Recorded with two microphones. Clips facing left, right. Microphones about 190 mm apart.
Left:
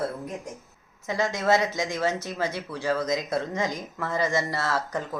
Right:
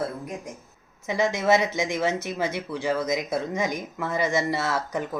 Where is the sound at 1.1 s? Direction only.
20° right (ahead or behind).